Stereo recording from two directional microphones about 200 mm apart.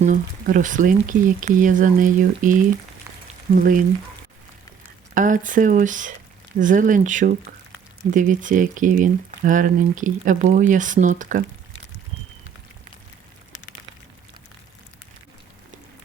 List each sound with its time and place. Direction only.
0.0 s speech: 40° right (ahead or behind)
5.1 s speech: 40° right (ahead or behind)